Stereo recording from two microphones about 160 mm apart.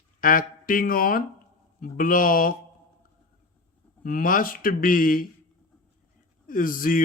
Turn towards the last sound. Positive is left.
turn(degrees=60)  # may be behind; listen again after turning